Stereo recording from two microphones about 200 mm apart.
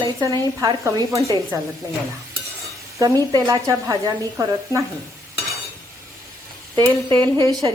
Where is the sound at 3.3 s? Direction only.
15° right (ahead or behind).